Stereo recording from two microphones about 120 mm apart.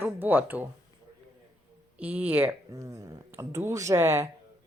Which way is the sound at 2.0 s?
10° right (ahead or behind).